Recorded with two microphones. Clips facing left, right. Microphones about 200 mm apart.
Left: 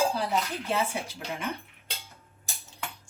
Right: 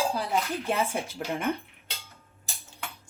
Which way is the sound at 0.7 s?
50° right (ahead or behind).